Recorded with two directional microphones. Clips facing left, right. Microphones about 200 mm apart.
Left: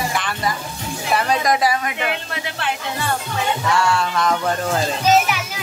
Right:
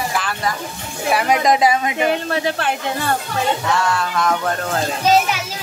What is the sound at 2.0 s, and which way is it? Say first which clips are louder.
Speech: right 7 dB; 40° right (ahead or behind).